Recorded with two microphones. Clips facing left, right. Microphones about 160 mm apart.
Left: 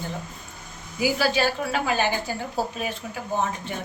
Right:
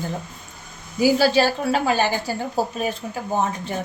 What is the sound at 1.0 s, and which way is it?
A woman's voice, 35° right (ahead or behind).